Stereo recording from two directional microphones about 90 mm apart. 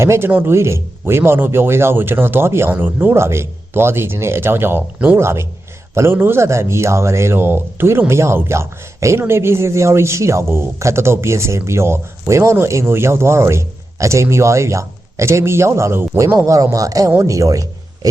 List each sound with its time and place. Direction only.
0.0 s a man's voice: 30° right (ahead or behind)